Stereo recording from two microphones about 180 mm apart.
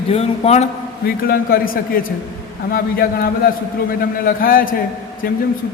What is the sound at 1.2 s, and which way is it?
A man's voice, 55° left (ahead or behind).